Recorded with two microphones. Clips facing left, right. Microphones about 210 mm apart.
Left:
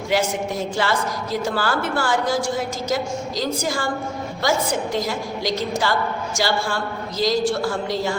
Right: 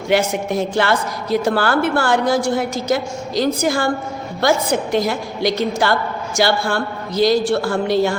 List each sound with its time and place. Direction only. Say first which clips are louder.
0.1 s a woman's voice: right 5 dB; 60° right (ahead or behind)